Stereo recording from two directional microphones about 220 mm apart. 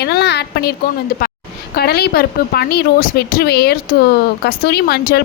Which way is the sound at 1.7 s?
45° left (ahead or behind).